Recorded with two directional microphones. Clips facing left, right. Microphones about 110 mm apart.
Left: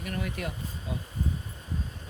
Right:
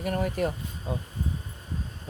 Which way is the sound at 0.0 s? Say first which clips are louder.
Right 7 dB; 45° right (ahead or behind).